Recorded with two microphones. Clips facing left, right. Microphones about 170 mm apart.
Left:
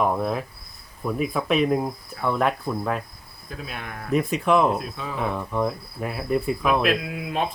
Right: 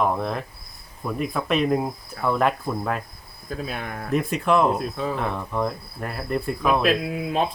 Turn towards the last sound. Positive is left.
turn(degrees=-35)  # may be behind; listen again after turning